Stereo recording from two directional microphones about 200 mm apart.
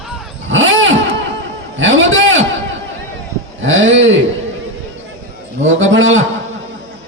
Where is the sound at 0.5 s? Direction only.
70° right (ahead or behind).